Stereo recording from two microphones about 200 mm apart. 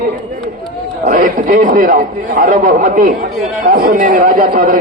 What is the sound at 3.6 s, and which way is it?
A man's voice, 45° right (ahead or behind).